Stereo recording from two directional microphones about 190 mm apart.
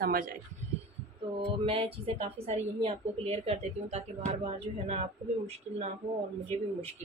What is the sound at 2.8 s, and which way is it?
Speech, 30° right (ahead or behind).